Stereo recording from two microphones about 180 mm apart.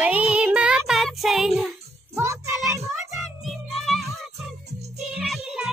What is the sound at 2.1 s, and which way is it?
Speech, 15° right (ahead or behind).